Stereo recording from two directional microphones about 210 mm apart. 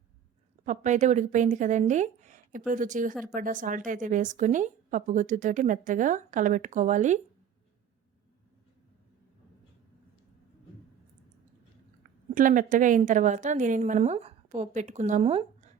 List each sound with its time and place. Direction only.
0.6 s speech: 40° right (ahead or behind)
12.3 s speech: 40° right (ahead or behind)